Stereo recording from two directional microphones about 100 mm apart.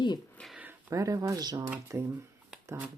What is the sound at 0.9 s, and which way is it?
Speech, 35° right (ahead or behind).